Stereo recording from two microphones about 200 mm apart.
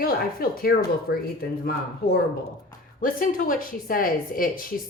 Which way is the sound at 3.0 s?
45° left (ahead or behind).